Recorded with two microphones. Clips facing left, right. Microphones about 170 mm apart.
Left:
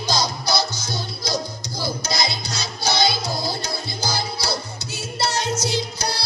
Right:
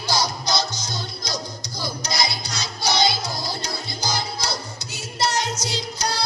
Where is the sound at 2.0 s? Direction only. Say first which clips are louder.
Left 1 dB; 15° right (ahead or behind).